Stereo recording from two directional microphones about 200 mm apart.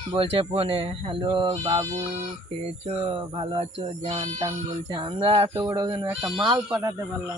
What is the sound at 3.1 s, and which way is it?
Speech, 25° right (ahead or behind).